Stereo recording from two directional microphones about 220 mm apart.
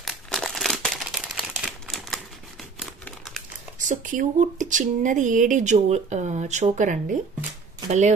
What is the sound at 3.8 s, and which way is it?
Speech, 35° right (ahead or behind).